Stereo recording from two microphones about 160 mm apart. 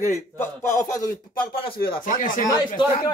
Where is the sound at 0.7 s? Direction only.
25° left (ahead or behind).